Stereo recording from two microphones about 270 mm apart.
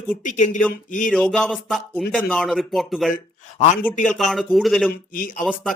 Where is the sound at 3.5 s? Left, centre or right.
Left.